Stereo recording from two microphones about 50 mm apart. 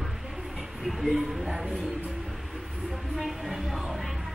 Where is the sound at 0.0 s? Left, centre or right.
Centre.